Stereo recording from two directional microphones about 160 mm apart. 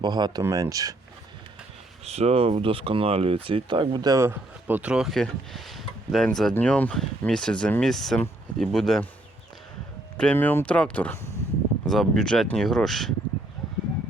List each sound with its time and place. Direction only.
0.0 s speech: 25° right (ahead or behind)
2.0 s speech: 40° right (ahead or behind); by 9.0 s centre (ahead or behind)
10.2 s speech: 10° left (ahead or behind)